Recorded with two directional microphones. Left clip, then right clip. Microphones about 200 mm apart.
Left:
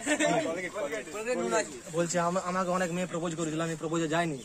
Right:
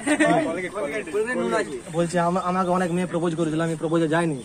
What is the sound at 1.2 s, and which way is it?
Speech, 60° left (ahead or behind).